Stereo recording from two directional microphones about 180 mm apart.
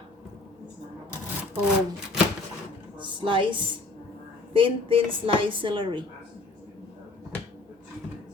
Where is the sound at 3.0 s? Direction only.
25° right (ahead or behind).